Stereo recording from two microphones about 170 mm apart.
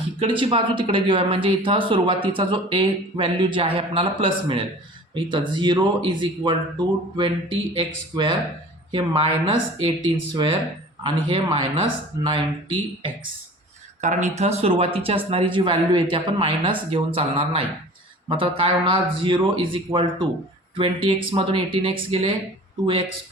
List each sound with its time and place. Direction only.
0.2 s speech: 30° right (ahead or behind)
14.0 s speech: 45° right (ahead or behind)